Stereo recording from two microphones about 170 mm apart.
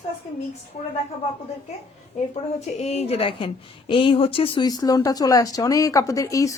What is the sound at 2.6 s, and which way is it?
A woman's voice, 40° left (ahead or behind).